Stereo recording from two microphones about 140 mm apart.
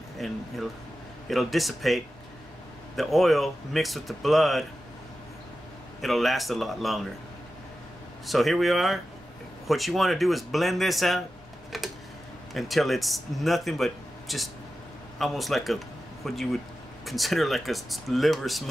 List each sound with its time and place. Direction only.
0.2 s speech: centre (ahead or behind)
5.9 s speech: centre (ahead or behind)
8.3 s speech: centre (ahead or behind)
11.7 s tick-tock: centre (ahead or behind)
12.5 s speech: centre (ahead or behind)